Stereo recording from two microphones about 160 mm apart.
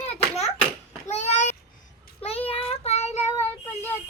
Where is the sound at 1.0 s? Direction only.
45° left (ahead or behind).